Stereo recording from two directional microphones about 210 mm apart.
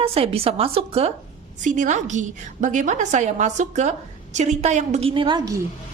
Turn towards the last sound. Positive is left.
turn(degrees=-25)  # may be behind; listen again after turning